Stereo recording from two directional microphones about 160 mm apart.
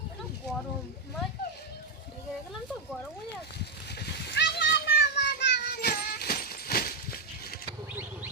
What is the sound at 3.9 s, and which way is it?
Children playing, 90° left.